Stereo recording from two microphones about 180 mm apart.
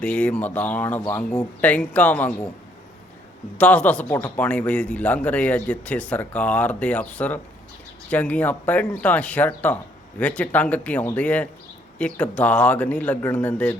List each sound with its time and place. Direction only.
0.0 s a man's voice: 5° left (ahead or behind)
3.6 s a man's voice: 10° left (ahead or behind)